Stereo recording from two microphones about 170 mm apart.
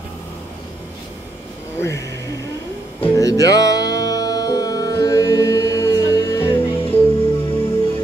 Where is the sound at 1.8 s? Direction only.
15° left (ahead or behind).